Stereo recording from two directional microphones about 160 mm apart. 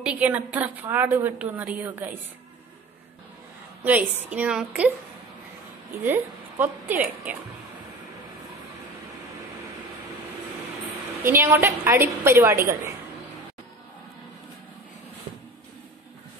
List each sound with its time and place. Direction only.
0.0 s a woman's voice: 10° right (ahead or behind)
3.8 s a woman's voice: 10° right (ahead or behind)
6.0 s a woman's voice: 10° right (ahead or behind)
11.2 s a woman's voice: 15° right (ahead or behind)